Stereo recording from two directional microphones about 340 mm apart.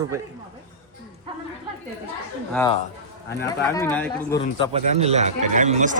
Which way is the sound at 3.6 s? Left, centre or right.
Centre.